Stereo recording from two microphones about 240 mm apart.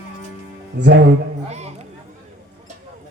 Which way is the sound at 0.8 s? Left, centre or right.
Right.